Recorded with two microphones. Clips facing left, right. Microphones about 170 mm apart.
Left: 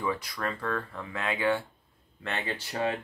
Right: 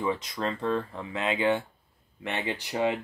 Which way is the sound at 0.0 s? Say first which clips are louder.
Right 2 dB; 20° right (ahead or behind).